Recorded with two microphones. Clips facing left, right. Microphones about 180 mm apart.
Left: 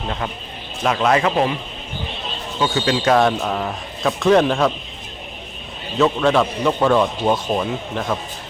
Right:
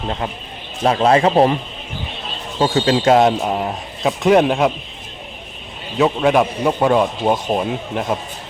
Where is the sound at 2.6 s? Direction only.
30° right (ahead or behind).